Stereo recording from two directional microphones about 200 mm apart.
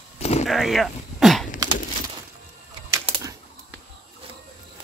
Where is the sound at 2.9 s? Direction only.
15° right (ahead or behind).